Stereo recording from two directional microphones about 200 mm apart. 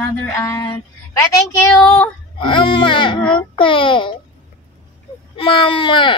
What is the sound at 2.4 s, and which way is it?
Speech, 25° left (ahead or behind).